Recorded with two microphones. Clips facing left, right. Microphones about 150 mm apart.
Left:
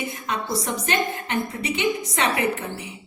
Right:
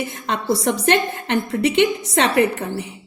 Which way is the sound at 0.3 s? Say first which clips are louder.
Right 7 dB; 70° right (ahead or behind).